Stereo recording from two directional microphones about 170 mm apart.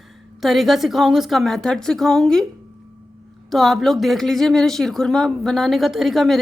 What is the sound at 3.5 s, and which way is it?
A woman's voice, centre (ahead or behind).